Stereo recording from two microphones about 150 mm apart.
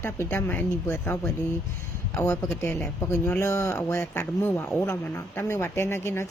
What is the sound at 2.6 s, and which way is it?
Speech, 10° left (ahead or behind).